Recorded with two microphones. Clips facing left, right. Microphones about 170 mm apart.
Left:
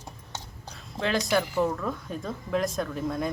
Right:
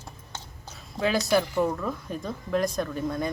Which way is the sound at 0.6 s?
5° right (ahead or behind).